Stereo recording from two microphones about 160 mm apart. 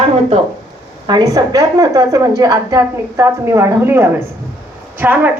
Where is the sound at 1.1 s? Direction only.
25° right (ahead or behind).